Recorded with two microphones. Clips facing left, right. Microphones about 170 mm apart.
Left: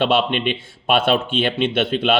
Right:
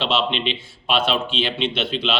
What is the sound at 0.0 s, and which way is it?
Speech, 55° left (ahead or behind).